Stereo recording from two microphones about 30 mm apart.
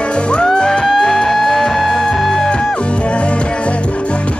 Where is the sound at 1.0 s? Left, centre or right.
Centre.